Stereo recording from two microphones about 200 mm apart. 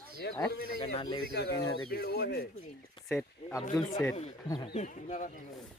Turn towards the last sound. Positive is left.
turn(degrees=40)  # may be behind; listen again after turning